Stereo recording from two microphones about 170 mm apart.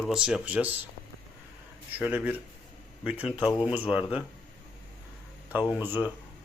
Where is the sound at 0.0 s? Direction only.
5° right (ahead or behind).